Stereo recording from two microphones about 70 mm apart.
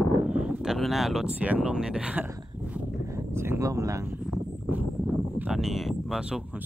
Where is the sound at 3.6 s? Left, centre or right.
Right.